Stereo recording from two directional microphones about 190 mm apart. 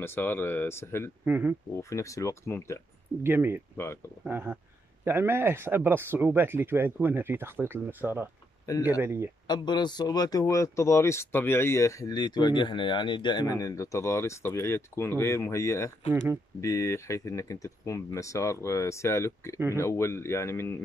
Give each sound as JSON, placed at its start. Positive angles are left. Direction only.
{"t": 0.0, "sound": "speech", "side_deg": 10}
{"t": 1.2, "sound": "speech", "side_deg": -10}
{"t": 1.7, "sound": "speech", "side_deg": 15}
{"t": 3.3, "sound": "speech", "side_deg": -10}
{"t": 3.7, "sound": "speech", "side_deg": 15}
{"t": 4.2, "sound": "speech", "side_deg": -10}
{"t": 9.5, "sound": "speech", "side_deg": 25}